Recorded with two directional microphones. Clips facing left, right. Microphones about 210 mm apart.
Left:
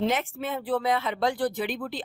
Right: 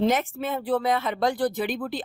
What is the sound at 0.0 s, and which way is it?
Speech, 40° right (ahead or behind).